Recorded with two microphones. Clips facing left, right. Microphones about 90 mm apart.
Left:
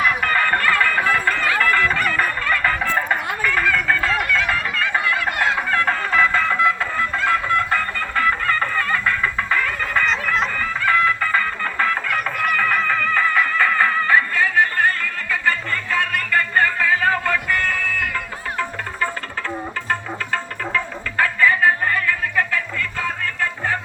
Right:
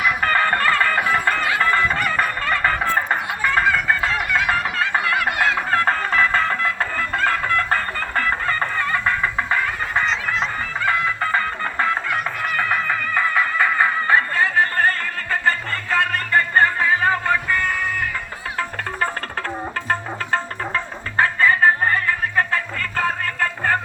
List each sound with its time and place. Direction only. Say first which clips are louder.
0.2 s music: right 1 dB; 35° right (ahead or behind)
5.7 s music: even; 40° right (ahead or behind)
10.1 s music: left 2 dB; 50° left (ahead or behind)
10.8 s music: left 3 dB; 30° right (ahead or behind)
12.5 s music: even; 15° right (ahead or behind)
14.1 s music: even; 30° right (ahead or behind)
19.9 s music: right 2 dB; 35° right (ahead or behind)